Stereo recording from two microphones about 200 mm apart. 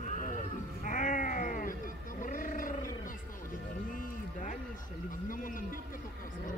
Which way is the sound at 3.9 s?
40° left (ahead or behind).